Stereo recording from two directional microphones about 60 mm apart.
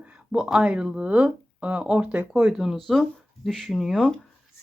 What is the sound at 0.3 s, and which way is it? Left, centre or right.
Speech, centre.